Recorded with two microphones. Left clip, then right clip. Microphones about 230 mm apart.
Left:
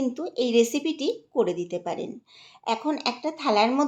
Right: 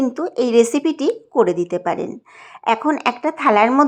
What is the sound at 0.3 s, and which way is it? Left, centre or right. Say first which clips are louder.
Speech: right 7 dB; centre.